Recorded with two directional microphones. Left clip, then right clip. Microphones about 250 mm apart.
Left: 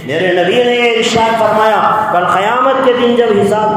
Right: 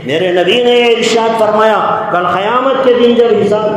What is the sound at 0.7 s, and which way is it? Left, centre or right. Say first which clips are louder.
A man's voice: right 2 dB; right.